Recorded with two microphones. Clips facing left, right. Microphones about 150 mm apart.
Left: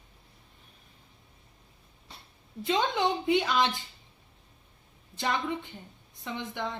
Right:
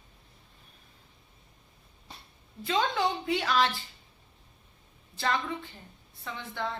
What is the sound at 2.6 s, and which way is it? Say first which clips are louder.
A woman's voice: left 1 dB; 20° left (ahead or behind).